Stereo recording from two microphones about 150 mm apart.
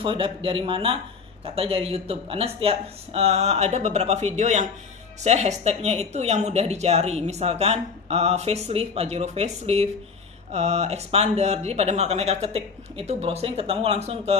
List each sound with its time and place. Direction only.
0.0 s speech: 35° right (ahead or behind)